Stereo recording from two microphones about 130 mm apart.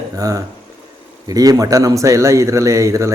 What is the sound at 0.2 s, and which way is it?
Speech, 30° right (ahead or behind).